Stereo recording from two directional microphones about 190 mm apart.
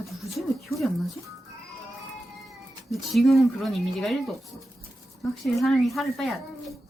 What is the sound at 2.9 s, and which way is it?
Speech, centre (ahead or behind).